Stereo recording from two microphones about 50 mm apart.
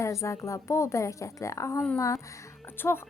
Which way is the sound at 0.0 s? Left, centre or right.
Left.